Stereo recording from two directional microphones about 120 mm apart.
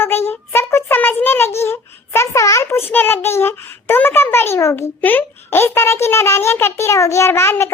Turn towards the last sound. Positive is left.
turn(degrees=20)  # may be behind; listen again after turning